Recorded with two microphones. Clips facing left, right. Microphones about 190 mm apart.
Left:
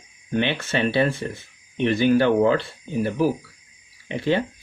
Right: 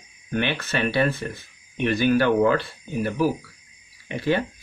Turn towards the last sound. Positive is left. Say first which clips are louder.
# left 1 dB
turn(degrees=20)  # may be behind; listen again after turning